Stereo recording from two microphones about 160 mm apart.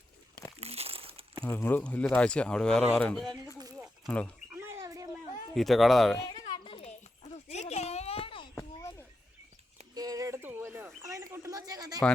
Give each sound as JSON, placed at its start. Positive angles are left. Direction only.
{"t": 0.6, "sound": "crumpling", "side_deg": -40}
{"t": 1.5, "sound": "speech", "side_deg": 15}
{"t": 3.6, "sound": "snake", "side_deg": -25}
{"t": 4.0, "sound": "speech", "side_deg": 10}
{"t": 4.5, "sound": "a sound", "side_deg": -15}
{"t": 5.5, "sound": "speech", "side_deg": 0}
{"t": 6.5, "sound": "a sound", "side_deg": 35}
{"t": 8.5, "sound": "a sound", "side_deg": 20}
{"t": 9.9, "sound": "bird", "side_deg": -25}